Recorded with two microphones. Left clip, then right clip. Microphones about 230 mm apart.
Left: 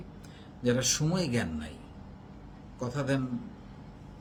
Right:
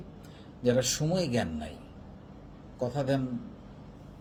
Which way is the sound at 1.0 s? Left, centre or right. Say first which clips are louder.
Right 2 dB; centre.